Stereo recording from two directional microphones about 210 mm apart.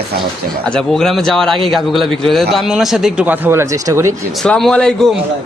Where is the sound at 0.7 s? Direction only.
5° left (ahead or behind); by 4.2 s 15° right (ahead or behind).